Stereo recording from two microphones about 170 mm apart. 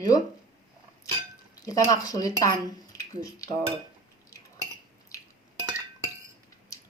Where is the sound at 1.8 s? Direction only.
20° left (ahead or behind).